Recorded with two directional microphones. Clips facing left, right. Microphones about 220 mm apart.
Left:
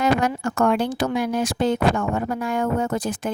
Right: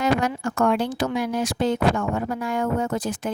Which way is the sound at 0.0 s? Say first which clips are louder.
Left 2 dB; 55° left (ahead or behind).